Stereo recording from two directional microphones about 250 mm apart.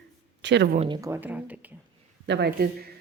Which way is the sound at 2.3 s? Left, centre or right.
Right.